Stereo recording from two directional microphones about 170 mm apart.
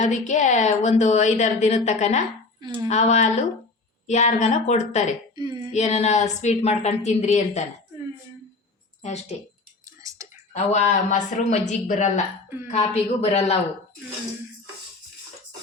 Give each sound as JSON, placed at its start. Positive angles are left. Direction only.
{"t": 0.0, "sound": "a woman's voice", "side_deg": 45}
{"t": 5.4, "sound": "a sound", "side_deg": -25}
{"t": 5.7, "sound": "a woman's voice", "side_deg": 40}
{"t": 9.0, "sound": "a sound", "side_deg": 40}
{"t": 10.0, "sound": "whispering", "side_deg": -20}
{"t": 10.5, "sound": "a woman's voice", "side_deg": 45}